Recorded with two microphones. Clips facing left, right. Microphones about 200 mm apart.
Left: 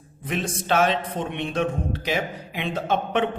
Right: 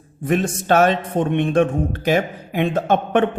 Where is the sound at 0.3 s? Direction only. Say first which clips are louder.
Right 7 dB; 50° right (ahead or behind).